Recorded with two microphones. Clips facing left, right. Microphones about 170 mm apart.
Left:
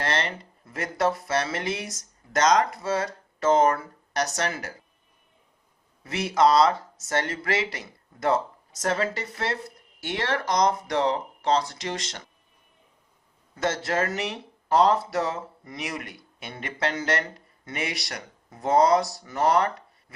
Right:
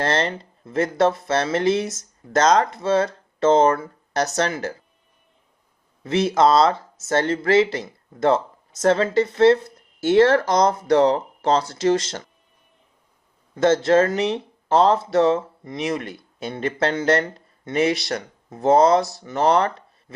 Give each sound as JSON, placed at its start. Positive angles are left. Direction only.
{"t": 0.0, "sound": "speech", "side_deg": -30}
{"t": 6.1, "sound": "speech", "side_deg": -25}
{"t": 14.2, "sound": "speech", "side_deg": -25}